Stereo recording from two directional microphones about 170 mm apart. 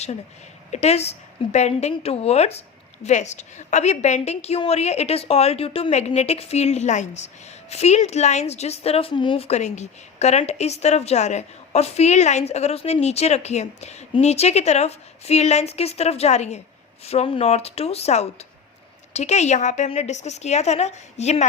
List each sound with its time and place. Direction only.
0.7 s a woman's voice: 40° left (ahead or behind)